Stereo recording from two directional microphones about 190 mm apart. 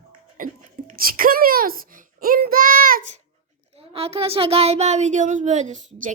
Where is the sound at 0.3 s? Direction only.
45° right (ahead or behind).